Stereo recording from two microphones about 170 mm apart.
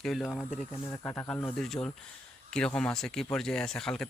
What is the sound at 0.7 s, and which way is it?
Speech, 15° left (ahead or behind).